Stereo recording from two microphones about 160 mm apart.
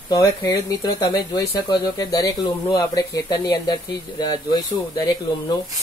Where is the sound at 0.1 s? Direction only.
20° left (ahead or behind).